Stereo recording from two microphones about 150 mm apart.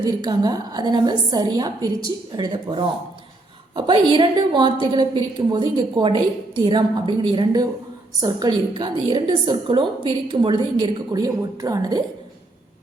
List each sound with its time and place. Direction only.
0.0 s a woman's voice: 25° right (ahead or behind)